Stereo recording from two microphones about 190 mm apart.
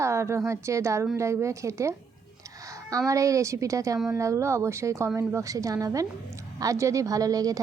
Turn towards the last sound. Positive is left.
turn(degrees=-20)  # may be behind; listen again after turning